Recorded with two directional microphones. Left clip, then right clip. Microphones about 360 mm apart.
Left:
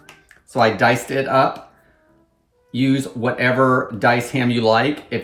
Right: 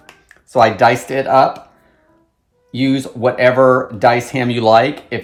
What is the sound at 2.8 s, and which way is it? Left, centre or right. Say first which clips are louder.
Speech: right 5 dB; centre.